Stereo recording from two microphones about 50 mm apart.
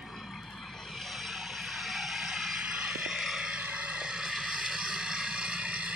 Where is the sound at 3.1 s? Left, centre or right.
Centre.